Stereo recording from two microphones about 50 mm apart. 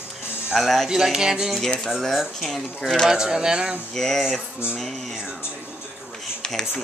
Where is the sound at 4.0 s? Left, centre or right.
Centre.